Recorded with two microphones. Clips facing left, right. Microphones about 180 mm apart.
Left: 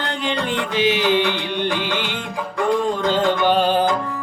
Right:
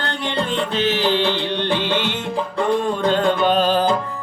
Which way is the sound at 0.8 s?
15° left (ahead or behind).